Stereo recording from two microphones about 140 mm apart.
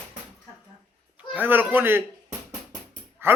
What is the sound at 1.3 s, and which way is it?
Speech, 15° right (ahead or behind).